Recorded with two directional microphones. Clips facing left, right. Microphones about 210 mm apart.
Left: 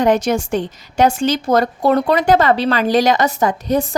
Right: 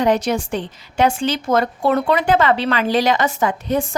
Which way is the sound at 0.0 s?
45° left (ahead or behind).